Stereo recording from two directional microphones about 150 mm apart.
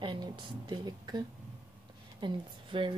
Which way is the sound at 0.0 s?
30° right (ahead or behind).